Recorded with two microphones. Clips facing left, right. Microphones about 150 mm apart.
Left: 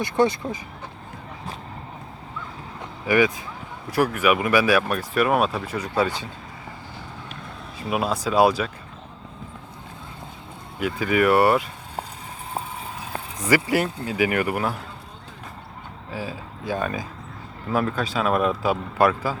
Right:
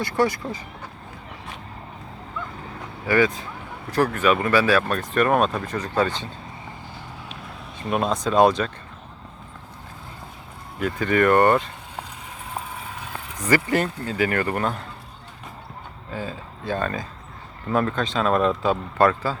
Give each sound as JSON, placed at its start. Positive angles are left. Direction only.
{"t": 0.0, "sound": "speech", "side_deg": 20}
{"t": 3.1, "sound": "speech", "side_deg": 10}
{"t": 7.8, "sound": "speech", "side_deg": 5}
{"t": 10.8, "sound": "speech", "side_deg": 10}
{"t": 13.4, "sound": "speech", "side_deg": 10}
{"t": 16.1, "sound": "speech", "side_deg": 10}